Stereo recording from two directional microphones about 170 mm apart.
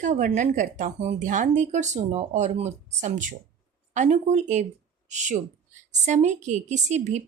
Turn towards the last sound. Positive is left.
turn(degrees=-45)  # may be behind; listen again after turning